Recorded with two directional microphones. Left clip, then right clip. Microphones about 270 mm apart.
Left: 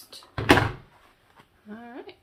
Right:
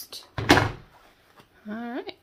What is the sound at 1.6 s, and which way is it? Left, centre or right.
Speech, right.